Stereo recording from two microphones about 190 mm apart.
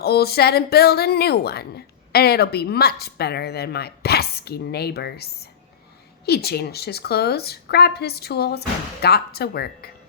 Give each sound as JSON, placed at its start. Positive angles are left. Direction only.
{"t": 0.0, "sound": "a woman's voice", "side_deg": 55}